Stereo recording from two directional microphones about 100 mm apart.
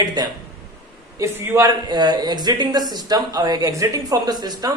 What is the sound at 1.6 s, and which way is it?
A woman's voice, 45° right (ahead or behind).